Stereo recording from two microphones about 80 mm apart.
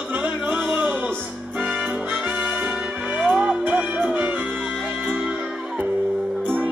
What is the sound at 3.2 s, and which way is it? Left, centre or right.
Music, centre.